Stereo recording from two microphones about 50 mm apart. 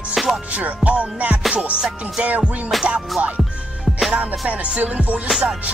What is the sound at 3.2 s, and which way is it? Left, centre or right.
Music, right.